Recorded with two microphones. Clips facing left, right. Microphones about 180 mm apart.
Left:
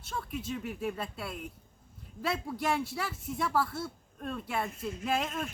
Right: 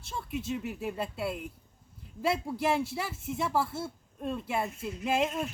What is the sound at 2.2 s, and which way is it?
Speech, 25° right (ahead or behind).